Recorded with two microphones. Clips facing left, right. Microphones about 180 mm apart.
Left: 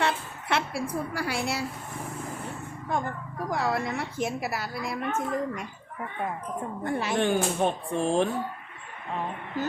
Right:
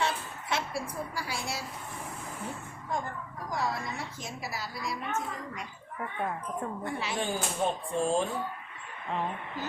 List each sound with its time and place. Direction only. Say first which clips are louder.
0.0 s a sound: left 4 dB; 65° left (ahead or behind)
3.5 s a woman's voice: left 5 dB; 65° left (ahead or behind)
6.8 s a woman's voice: left 10 dB; 50° left (ahead or behind)